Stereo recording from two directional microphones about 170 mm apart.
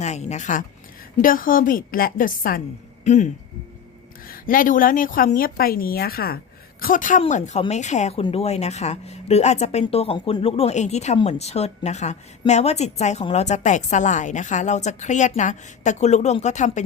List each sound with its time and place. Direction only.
0.0 s a woman's voice: 40° left (ahead or behind)
3.0 s speech: 40° left (ahead or behind)
4.3 s speech: 55° left (ahead or behind)
6.8 s a woman's voice: 50° left (ahead or behind)